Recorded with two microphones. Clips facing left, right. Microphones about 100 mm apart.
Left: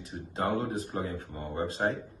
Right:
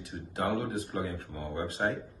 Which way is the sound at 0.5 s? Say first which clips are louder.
Left 1 dB; 30° left (ahead or behind).